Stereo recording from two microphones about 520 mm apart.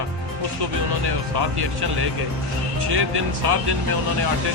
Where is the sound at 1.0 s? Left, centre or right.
Right.